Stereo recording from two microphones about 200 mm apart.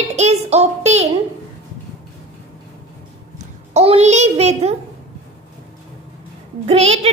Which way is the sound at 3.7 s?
30° right (ahead or behind).